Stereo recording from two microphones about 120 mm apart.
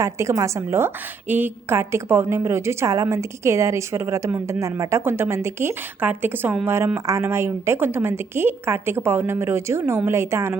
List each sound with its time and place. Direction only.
0.0 s a woman's voice: 25° right (ahead or behind)